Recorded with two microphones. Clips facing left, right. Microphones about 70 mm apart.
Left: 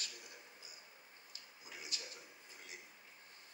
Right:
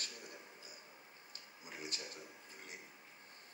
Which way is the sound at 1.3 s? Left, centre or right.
Right.